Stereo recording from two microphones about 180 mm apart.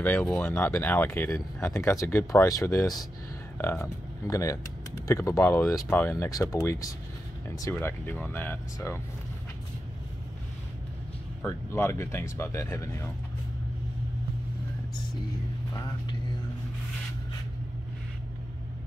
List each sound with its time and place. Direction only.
0.0 s speech: 10° left (ahead or behind)
11.4 s speech: 15° left (ahead or behind)
15.7 s a sound: 20° left (ahead or behind)